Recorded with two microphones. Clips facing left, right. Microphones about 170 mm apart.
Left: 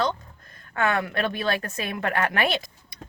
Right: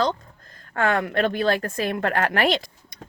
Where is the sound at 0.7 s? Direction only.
35° right (ahead or behind).